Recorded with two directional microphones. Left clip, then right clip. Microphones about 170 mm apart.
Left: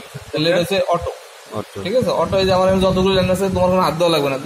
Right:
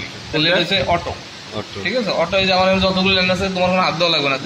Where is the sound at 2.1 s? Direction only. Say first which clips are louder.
Right 1 dB; 55° left (ahead or behind).